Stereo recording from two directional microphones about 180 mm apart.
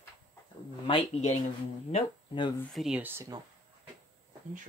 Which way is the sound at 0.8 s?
35° left (ahead or behind).